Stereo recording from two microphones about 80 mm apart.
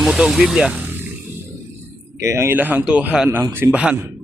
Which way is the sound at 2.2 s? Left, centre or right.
Right.